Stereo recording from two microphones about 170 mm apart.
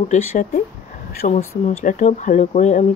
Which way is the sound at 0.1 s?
45° left (ahead or behind).